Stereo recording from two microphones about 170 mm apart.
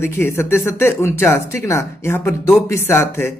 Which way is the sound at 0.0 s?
15° left (ahead or behind).